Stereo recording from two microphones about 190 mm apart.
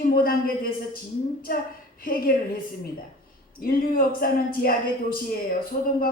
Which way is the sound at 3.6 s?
50° left (ahead or behind).